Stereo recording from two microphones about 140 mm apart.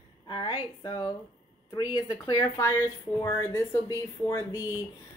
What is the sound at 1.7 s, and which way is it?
Speech, 25° left (ahead or behind).